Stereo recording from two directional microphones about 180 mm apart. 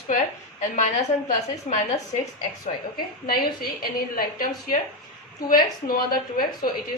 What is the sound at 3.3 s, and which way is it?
A woman's voice, 55° left (ahead or behind).